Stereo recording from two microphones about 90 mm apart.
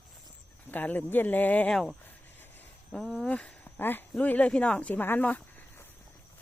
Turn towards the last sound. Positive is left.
turn(degrees=20)  # may be behind; listen again after turning